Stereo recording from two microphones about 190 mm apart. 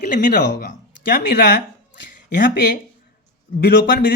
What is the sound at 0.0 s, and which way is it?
Speech, 45° left (ahead or behind).